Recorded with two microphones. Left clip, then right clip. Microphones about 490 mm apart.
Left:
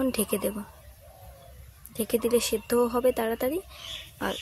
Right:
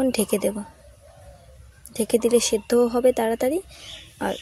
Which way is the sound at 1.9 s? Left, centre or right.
Left.